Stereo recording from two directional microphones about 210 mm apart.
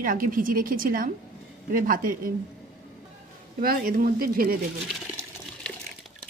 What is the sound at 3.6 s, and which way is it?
Speech, 40° right (ahead or behind).